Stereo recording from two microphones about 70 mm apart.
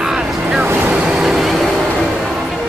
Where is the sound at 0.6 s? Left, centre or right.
Right.